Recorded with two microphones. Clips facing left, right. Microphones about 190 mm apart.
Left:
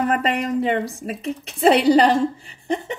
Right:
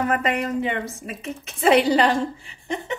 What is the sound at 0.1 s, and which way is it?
Speech, 35° left (ahead or behind).